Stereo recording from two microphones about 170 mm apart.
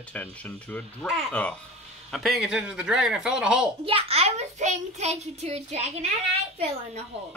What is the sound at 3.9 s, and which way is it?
A child's voice, 35° right (ahead or behind).